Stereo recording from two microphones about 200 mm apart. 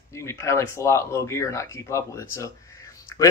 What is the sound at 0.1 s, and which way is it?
Speech, 15° left (ahead or behind).